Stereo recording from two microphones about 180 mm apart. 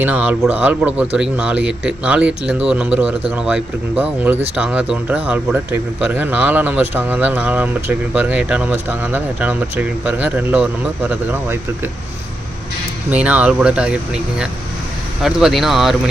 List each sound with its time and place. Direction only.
0.0 s speech: 10° right (ahead or behind)
13.1 s speech: 10° right (ahead or behind)